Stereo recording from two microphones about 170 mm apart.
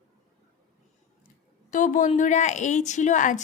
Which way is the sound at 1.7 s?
50° left (ahead or behind).